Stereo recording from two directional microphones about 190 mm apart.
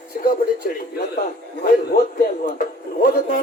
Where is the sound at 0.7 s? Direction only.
50° left (ahead or behind).